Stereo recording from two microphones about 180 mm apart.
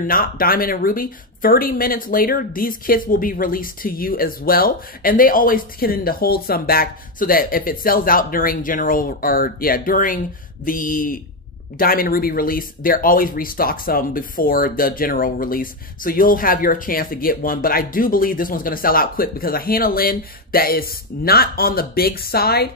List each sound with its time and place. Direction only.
0.0 s speech: 55° left (ahead or behind)